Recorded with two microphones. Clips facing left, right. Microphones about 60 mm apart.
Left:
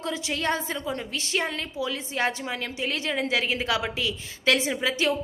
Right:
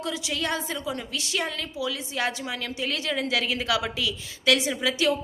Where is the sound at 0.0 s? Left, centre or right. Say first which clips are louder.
Left 1 dB; left.